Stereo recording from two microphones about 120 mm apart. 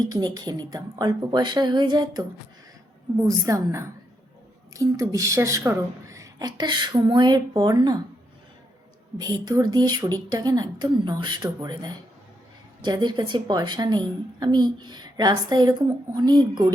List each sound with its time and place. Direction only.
0.0 s speech: 35° right (ahead or behind)
3.2 s a woman's voice: 25° right (ahead or behind)
9.1 s speech: 35° right (ahead or behind)